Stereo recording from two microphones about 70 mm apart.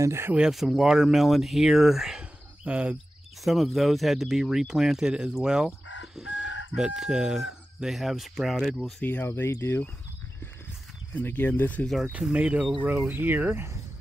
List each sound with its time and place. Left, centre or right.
0.0 s speech: right
0.5 s speech: centre
2.6 s speech: centre
3.4 s speech: centre
9.2 s speech: left
11.1 s speech: left
12.1 s speech: centre
13.0 s speech: right